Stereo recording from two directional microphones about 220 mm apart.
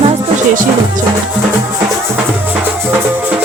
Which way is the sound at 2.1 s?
10° right (ahead or behind).